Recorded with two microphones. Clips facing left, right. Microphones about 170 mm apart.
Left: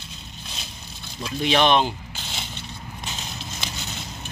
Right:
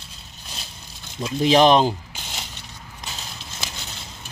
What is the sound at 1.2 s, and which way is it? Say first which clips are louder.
Speech: right 5 dB; 30° right (ahead or behind).